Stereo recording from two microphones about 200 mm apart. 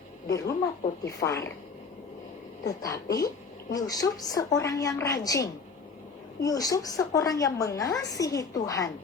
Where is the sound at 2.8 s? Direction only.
15° left (ahead or behind).